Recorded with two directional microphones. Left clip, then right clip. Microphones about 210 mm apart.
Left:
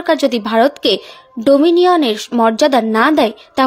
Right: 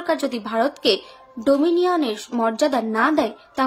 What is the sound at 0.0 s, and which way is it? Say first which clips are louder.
Speech: left 9 dB; 35° left (ahead or behind).